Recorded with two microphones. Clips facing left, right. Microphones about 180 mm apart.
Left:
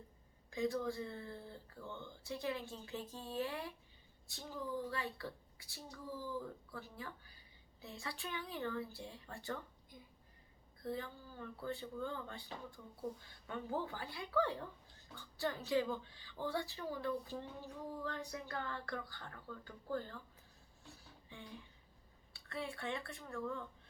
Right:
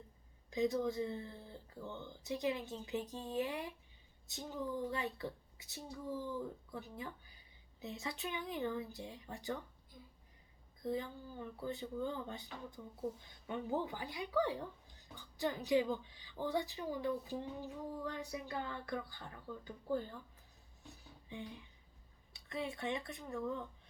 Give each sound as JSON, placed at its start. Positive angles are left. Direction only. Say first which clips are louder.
{"t": 0.5, "sound": "speech", "louder": "right 3 dB", "side_deg": -20}
{"t": 10.8, "sound": "speech", "louder": "right 4 dB", "side_deg": -15}
{"t": 20.8, "sound": "a sound", "louder": "right 2 dB", "side_deg": -20}
{"t": 22.3, "sound": "speech", "louder": "right 3 dB", "side_deg": -20}